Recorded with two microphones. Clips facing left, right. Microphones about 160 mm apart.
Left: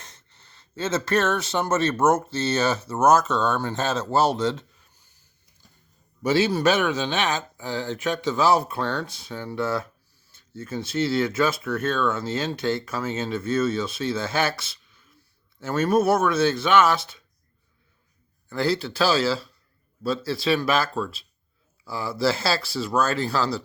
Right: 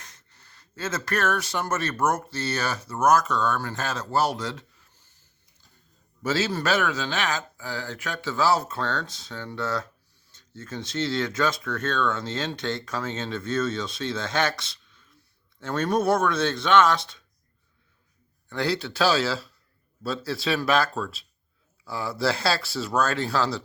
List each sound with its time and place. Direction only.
0.0 s speech: 25° left (ahead or behind)
6.2 s speech: 15° left (ahead or behind)
18.4 s speech: centre (ahead or behind)